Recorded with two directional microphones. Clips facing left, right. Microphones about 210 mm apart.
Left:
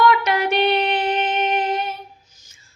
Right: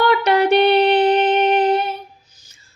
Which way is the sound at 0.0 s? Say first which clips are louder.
Right 3 dB; 35° right (ahead or behind).